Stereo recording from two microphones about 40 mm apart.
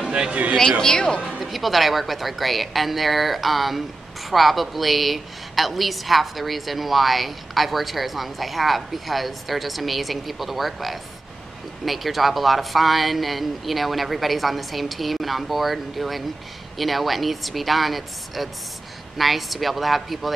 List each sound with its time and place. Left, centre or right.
0.1 s speech: right
0.6 s speech: centre
1.4 s a woman's voice: centre